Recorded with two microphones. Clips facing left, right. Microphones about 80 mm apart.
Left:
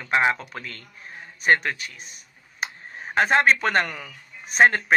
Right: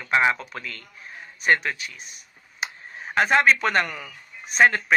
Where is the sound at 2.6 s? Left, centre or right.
Left.